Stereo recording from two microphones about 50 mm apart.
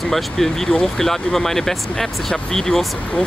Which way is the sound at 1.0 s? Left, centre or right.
Centre.